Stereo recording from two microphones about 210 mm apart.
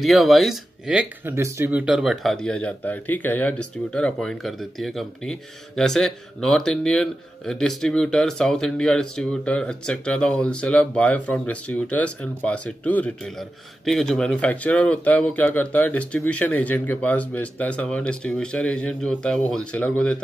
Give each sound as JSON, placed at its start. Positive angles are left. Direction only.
{"t": 0.0, "sound": "speech", "side_deg": 0}